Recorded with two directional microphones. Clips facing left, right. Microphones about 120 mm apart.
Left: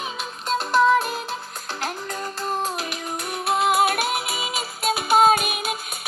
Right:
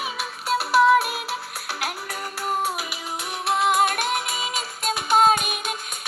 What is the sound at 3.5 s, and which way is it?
Music, centre (ahead or behind).